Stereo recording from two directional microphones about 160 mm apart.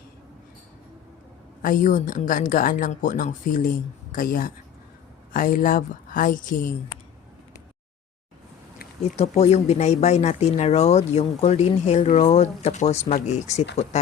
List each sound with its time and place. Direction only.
1.6 s speech: 60° left (ahead or behind)
9.1 s speech: 40° left (ahead or behind)